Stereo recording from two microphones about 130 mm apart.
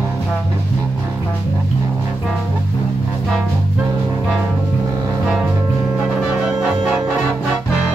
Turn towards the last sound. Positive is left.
turn(degrees=-5)  # may be behind; listen again after turning